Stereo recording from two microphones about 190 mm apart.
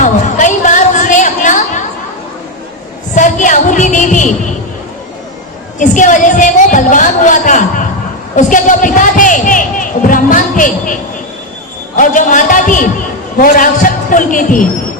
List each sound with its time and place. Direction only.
0.0 s a sound: 40° left (ahead or behind)
3.2 s music: 40° left (ahead or behind)
5.8 s a woman's voice: 40° left (ahead or behind)
11.9 s a man's voice: 45° left (ahead or behind)